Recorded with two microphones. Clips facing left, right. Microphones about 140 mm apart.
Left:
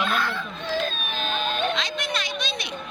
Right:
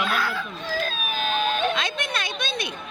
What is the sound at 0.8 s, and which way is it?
Baby cry, 5° right (ahead or behind).